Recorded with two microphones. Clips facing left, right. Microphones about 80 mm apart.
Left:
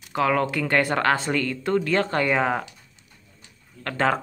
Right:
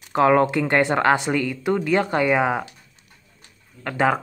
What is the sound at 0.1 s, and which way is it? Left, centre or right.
Speech, right.